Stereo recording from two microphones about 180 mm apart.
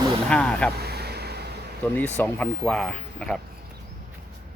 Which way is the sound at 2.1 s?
10° left (ahead or behind).